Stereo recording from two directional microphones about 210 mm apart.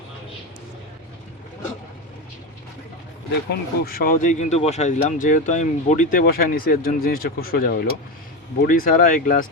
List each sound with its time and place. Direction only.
3.5 s speech: 45° left (ahead or behind)